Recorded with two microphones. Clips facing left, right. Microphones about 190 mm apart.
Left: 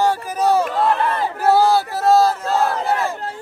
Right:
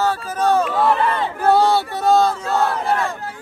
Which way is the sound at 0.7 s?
Centre (ahead or behind).